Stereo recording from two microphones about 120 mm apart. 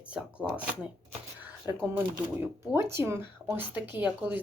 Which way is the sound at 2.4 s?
20° right (ahead or behind).